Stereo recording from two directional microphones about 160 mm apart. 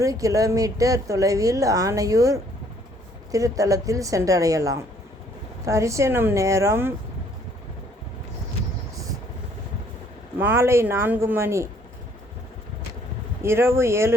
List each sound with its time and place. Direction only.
0.0 s a woman's voice: 20° right (ahead or behind)
10.4 s speech: 15° right (ahead or behind)
13.4 s speech: 15° right (ahead or behind)